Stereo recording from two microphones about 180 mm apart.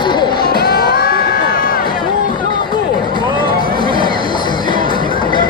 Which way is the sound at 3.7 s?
25° left (ahead or behind).